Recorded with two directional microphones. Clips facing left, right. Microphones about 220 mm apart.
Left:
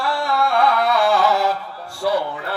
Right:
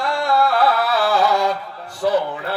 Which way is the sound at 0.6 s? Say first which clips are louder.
Left 1 dB; 5° right (ahead or behind).